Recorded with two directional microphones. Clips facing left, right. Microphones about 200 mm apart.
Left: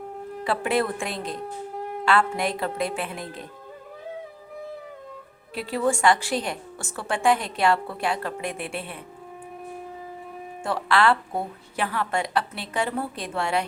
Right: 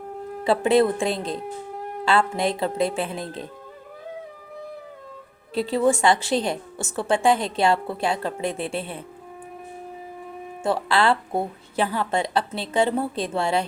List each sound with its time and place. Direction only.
0.4 s a woman's voice: 25° right (ahead or behind)
5.5 s a woman's voice: 25° right (ahead or behind)
10.6 s a woman's voice: 25° right (ahead or behind)